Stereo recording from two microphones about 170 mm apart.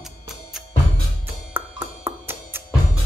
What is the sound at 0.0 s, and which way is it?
Music, 5° right (ahead or behind).